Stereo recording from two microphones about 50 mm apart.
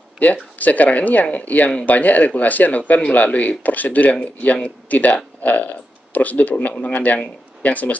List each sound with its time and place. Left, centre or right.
0.2 s speech: left